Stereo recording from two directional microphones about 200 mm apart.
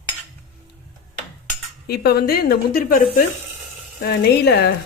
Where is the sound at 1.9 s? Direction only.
50° left (ahead or behind).